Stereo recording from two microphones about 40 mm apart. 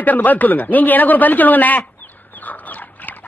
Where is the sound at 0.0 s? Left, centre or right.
Left.